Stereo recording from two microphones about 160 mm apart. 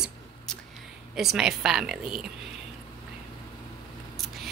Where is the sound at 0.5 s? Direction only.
Centre (ahead or behind).